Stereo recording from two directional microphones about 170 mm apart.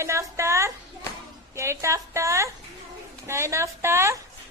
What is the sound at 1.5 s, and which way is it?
A woman's voice, 15° right (ahead or behind).